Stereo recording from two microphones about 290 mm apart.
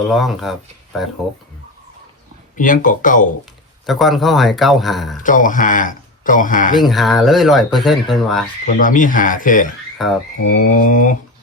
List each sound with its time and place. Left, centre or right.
0.1 s speech: centre
2.6 s speech: left
3.8 s speech: centre
5.2 s speech: left
6.7 s speech: centre
8.6 s speech: left
10.0 s speech: centre
10.3 s speech: left